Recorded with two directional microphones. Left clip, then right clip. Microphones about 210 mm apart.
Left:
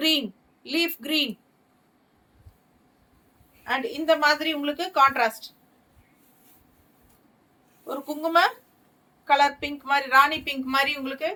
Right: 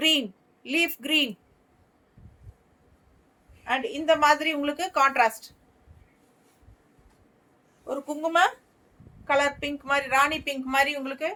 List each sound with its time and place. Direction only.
0.7 s a woman's voice: 25° right (ahead or behind)
3.6 s a woman's voice: 15° right (ahead or behind)
7.9 s a woman's voice: 15° right (ahead or behind)